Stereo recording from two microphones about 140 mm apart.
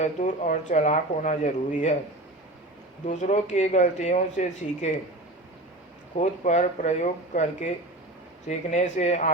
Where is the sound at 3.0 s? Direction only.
60° left (ahead or behind).